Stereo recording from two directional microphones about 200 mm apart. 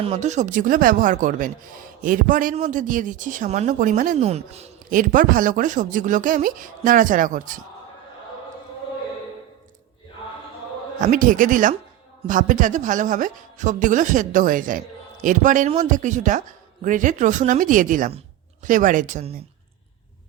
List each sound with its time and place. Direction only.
0.0 s a man's voice: 35° right (ahead or behind)
11.0 s a man's voice: 40° right (ahead or behind)